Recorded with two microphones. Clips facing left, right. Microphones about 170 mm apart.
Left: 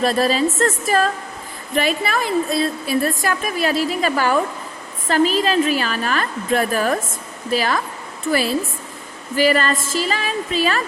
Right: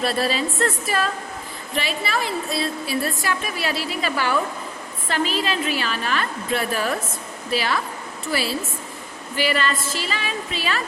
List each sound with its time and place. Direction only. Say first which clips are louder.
0.0 s a woman's voice: left 5 dB; 40° left (ahead or behind)